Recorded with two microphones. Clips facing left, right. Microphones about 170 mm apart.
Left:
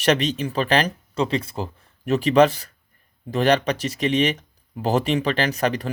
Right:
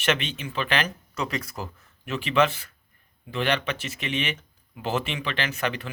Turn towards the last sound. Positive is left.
turn(degrees=40)  # may be behind; listen again after turning